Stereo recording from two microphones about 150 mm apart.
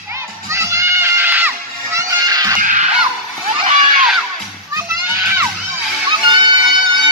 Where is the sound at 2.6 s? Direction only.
60° right (ahead or behind).